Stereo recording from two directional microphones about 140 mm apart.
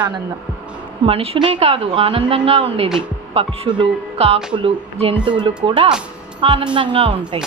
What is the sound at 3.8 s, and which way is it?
Music, 45° right (ahead or behind).